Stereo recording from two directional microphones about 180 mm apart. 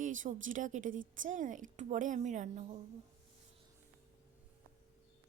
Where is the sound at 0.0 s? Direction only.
45° right (ahead or behind).